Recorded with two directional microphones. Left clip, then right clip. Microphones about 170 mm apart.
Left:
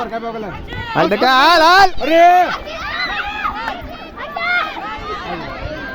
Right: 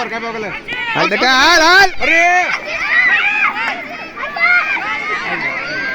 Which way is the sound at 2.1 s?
90° left.